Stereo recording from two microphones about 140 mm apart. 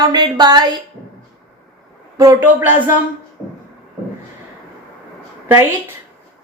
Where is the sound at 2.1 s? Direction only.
25° right (ahead or behind).